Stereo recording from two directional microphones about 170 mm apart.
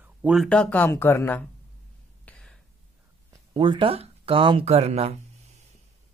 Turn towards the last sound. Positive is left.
turn(degrees=-40)  # may be behind; listen again after turning